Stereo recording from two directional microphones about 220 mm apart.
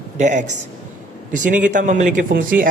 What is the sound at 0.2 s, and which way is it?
A man's voice, 35° right (ahead or behind).